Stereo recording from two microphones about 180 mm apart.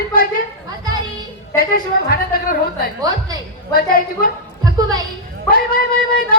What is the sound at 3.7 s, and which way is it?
Speech, 55° left (ahead or behind).